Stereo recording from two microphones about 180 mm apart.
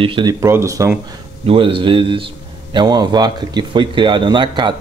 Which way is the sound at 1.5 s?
30° right (ahead or behind).